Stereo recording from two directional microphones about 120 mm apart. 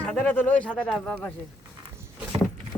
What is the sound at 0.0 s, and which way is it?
Speech, 10° left (ahead or behind).